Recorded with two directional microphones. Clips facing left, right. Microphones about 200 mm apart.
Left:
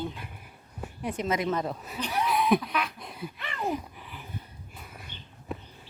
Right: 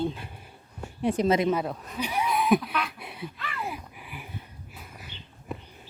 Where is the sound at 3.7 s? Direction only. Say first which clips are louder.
Left 6 dB; 10° right (ahead or behind).